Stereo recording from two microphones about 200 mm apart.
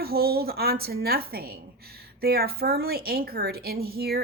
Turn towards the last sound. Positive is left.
turn(degrees=-50)  # may be behind; listen again after turning